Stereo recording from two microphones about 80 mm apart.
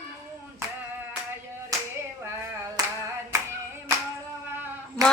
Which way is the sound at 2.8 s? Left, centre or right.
Right.